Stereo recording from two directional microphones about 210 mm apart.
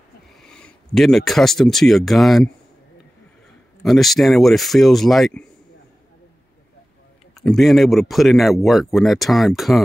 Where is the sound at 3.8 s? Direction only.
Centre (ahead or behind).